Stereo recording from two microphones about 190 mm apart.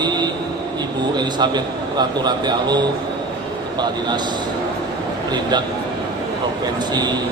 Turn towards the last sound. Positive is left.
turn(degrees=-20)  # may be behind; listen again after turning